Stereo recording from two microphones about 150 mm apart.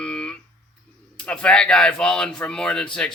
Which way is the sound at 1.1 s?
5° left (ahead or behind).